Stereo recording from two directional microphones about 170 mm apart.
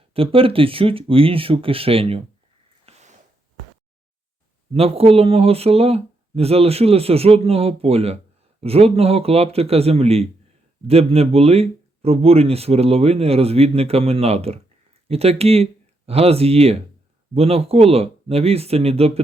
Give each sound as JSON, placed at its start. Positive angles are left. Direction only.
{"t": 0.1, "sound": "speech", "side_deg": -35}
{"t": 2.8, "sound": "a sound", "side_deg": -40}
{"t": 4.7, "sound": "speech", "side_deg": -35}